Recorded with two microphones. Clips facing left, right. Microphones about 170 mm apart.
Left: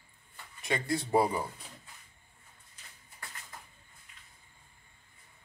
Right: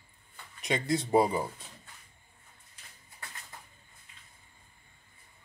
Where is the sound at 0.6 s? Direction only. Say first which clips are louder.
Right 2 dB; 20° right (ahead or behind).